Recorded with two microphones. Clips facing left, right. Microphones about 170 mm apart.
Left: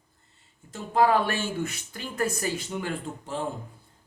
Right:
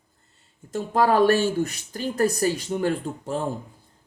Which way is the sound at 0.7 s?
45° right (ahead or behind).